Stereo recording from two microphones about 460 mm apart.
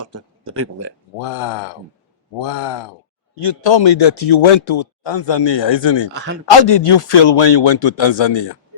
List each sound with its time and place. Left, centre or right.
0.0 s a sound: right
1.2 s speech: left
6.5 s speech: left